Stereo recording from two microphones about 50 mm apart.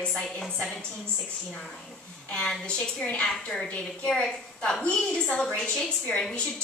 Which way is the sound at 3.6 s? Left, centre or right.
Left.